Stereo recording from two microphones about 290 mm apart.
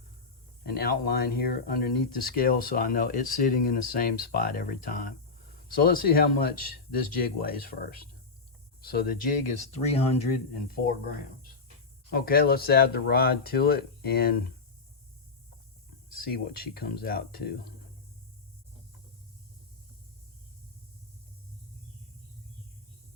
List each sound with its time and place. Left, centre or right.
0.6 s speech: left
9.7 s speech: left
10.7 s speech: left
12.1 s speech: left
16.1 s speech: left